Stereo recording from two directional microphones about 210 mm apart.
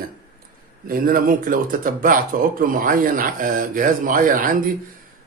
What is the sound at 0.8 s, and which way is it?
Speech, 40° right (ahead or behind).